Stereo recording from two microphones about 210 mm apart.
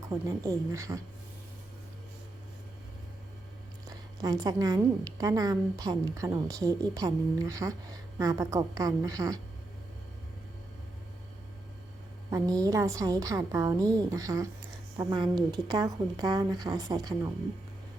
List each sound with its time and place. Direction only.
0.1 s a woman's voice: 15° right (ahead or behind)
4.2 s a woman's voice: 15° right (ahead or behind)
12.3 s a woman's voice: 15° right (ahead or behind)